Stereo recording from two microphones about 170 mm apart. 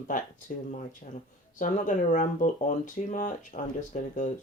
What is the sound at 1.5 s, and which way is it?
Speech, 50° left (ahead or behind).